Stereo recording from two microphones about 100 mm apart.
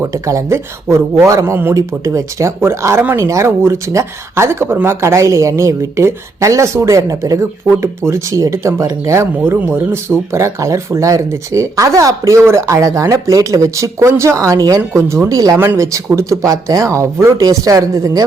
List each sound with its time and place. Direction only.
0.0 s speech: 30° right (ahead or behind)
15.5 s speech: 20° right (ahead or behind)